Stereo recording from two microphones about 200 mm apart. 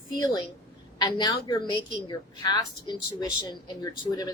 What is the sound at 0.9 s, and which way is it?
A woman's voice, 20° left (ahead or behind).